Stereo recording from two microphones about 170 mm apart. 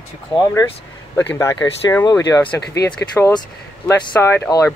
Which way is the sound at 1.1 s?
10° left (ahead or behind).